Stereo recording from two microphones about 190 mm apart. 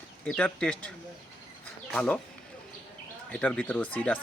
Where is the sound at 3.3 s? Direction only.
5° left (ahead or behind).